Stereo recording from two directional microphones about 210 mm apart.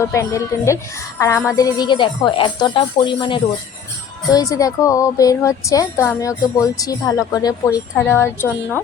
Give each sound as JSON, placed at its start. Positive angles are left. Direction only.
{"t": 0.1, "sound": "speech", "side_deg": 15}